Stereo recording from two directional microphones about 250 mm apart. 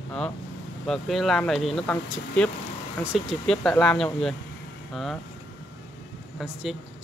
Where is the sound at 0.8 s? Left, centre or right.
Centre.